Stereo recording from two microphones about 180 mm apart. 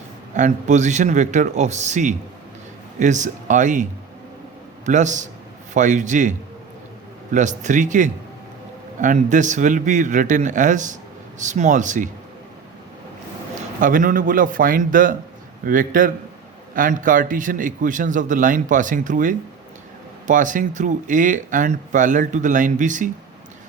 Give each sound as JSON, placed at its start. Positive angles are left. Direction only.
{"t": 0.3, "sound": "speech", "side_deg": -45}
{"t": 4.9, "sound": "speech", "side_deg": -45}
{"t": 7.3, "sound": "speech", "side_deg": -45}
{"t": 13.7, "sound": "speech", "side_deg": -50}